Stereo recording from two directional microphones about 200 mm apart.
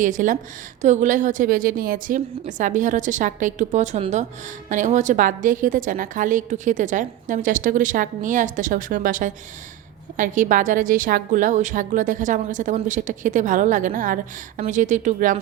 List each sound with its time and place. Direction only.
0.0 s a woman's voice: 40° right (ahead or behind)